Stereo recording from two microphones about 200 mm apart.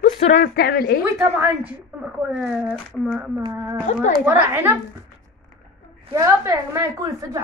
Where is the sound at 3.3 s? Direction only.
15° right (ahead or behind).